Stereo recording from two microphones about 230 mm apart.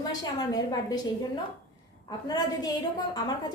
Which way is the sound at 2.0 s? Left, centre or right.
Centre.